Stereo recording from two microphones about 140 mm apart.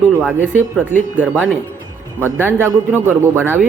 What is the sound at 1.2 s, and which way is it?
Speech, 10° right (ahead or behind).